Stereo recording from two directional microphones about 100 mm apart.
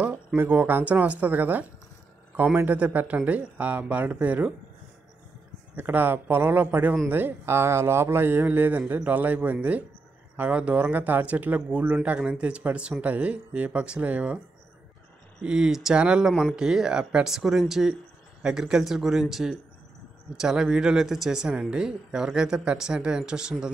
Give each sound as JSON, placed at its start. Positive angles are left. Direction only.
{"t": 0.4, "sound": "speech", "side_deg": -20}
{"t": 5.8, "sound": "a man's voice", "side_deg": -20}
{"t": 15.4, "sound": "speech", "side_deg": -5}